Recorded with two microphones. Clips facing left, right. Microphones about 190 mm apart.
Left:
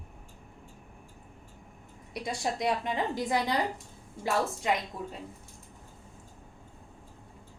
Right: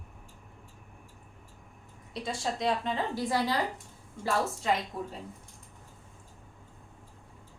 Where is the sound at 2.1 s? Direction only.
15° left (ahead or behind).